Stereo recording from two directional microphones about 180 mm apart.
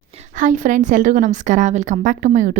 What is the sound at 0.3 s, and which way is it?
A woman's voice, 45° right (ahead or behind).